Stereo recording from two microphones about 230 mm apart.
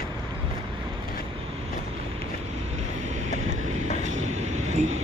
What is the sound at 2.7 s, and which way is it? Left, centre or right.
Vehicle, right.